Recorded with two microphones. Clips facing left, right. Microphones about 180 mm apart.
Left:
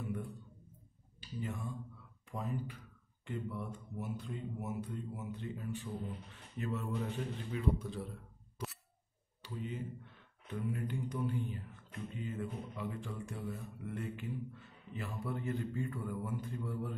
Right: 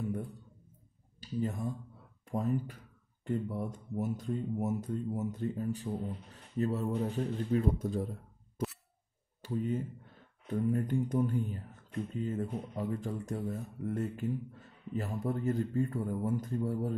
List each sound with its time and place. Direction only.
1.2 s speech: 40° right (ahead or behind)